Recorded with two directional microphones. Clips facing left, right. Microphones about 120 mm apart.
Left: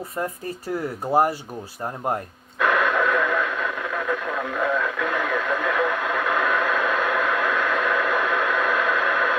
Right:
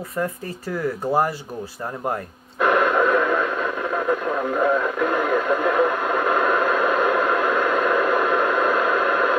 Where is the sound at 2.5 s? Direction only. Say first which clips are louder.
Right 3 dB; 35° right (ahead or behind).